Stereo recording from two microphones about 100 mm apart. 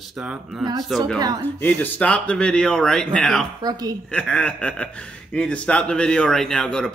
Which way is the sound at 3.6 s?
40° right (ahead or behind).